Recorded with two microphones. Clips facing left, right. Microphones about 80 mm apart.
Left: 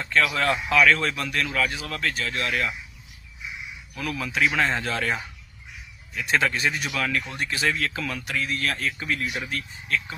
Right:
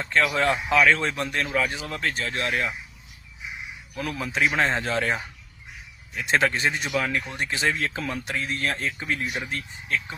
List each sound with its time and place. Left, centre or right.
0.0 s speech: right
3.9 s speech: right